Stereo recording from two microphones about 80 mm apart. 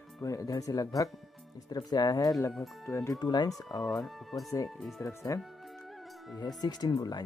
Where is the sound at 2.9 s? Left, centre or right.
Left.